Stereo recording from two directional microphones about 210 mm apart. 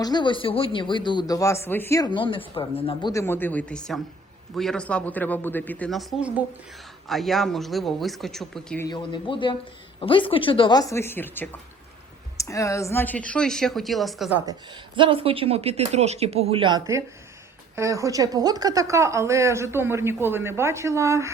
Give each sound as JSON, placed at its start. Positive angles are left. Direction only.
{"t": 0.0, "sound": "speech", "side_deg": 20}
{"t": 3.1, "sound": "speech", "side_deg": 15}
{"t": 8.9, "sound": "speech", "side_deg": 20}
{"t": 14.4, "sound": "speech", "side_deg": -20}